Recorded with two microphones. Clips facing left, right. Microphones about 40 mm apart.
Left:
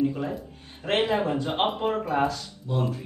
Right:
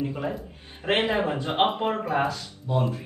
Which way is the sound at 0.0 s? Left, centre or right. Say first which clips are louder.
Left 2 dB; centre.